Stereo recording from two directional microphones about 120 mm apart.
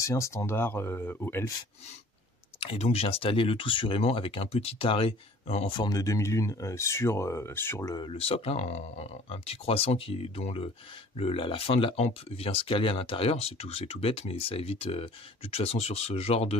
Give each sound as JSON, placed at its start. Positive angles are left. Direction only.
{"t": 0.0, "sound": "speech", "side_deg": 25}
{"t": 2.6, "sound": "speech", "side_deg": 55}
{"t": 5.7, "sound": "speech", "side_deg": 35}
{"t": 7.8, "sound": "speech", "side_deg": 35}
{"t": 8.1, "sound": "speech", "side_deg": 55}